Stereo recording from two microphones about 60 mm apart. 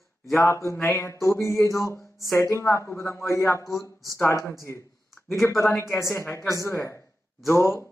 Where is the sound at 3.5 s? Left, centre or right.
Left.